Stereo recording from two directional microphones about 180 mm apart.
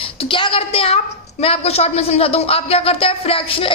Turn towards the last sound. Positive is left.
turn(degrees=30)  # may be behind; listen again after turning